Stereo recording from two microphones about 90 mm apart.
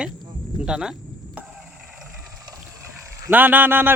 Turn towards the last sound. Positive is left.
turn(degrees=-20)  # may be behind; listen again after turning